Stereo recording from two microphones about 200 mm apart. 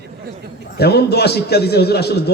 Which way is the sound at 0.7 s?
55° left (ahead or behind).